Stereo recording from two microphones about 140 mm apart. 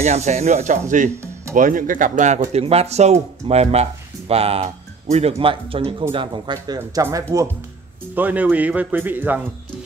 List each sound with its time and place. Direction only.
0.0 s speech: 55° right (ahead or behind)
2.5 s speech: 45° right (ahead or behind); by 7.4 s 25° right (ahead or behind)
8.1 s speech: 10° right (ahead or behind)